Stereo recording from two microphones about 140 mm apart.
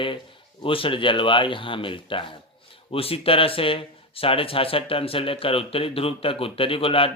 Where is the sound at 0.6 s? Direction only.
40° left (ahead or behind).